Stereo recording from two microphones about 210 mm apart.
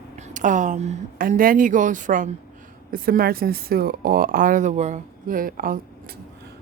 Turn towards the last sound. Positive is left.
turn(degrees=-45)  # may be behind; listen again after turning